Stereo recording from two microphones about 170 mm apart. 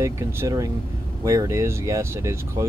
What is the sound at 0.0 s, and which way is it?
Speech, 20° right (ahead or behind).